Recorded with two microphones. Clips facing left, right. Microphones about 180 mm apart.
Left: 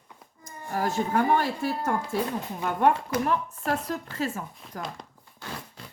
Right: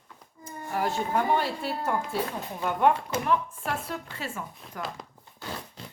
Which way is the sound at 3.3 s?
40° left (ahead or behind).